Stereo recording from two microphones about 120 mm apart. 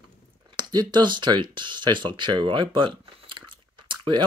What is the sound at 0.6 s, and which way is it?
Speech, 35° right (ahead or behind).